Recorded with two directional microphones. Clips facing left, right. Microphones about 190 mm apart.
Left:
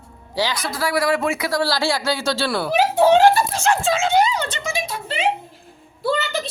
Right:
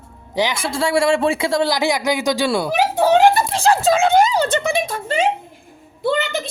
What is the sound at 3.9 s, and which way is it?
Speech, 50° right (ahead or behind).